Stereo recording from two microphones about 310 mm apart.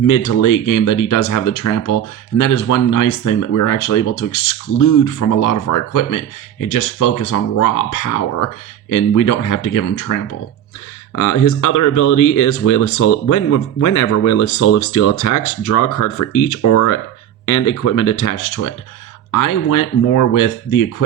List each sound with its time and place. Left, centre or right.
0.4 s speech: left
4.8 s speech: left